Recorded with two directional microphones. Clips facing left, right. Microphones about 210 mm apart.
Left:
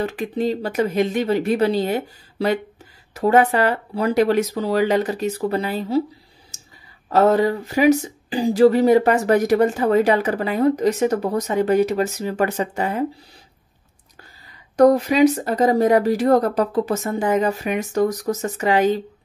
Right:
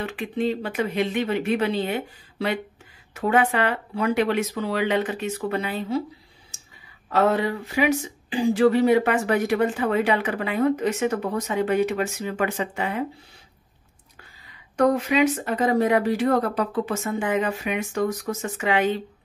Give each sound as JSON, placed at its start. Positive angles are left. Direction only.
{"t": 0.0, "sound": "speech", "side_deg": 40}
{"t": 7.1, "sound": "speech", "side_deg": 40}
{"t": 14.8, "sound": "speech", "side_deg": 35}